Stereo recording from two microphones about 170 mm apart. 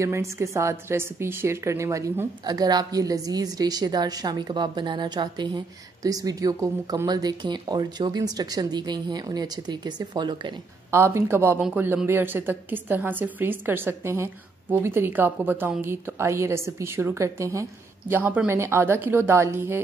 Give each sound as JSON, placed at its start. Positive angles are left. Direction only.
{"t": 0.0, "sound": "a woman's voice", "side_deg": -15}
{"t": 10.9, "sound": "a woman's voice", "side_deg": -15}